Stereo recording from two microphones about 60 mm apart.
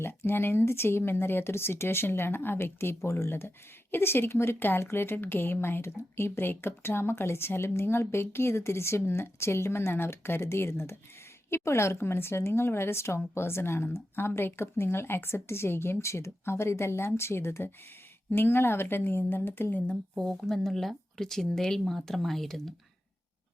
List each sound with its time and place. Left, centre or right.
0.0 s speech: left
3.0 s a woman's voice: left
20.3 s speech: centre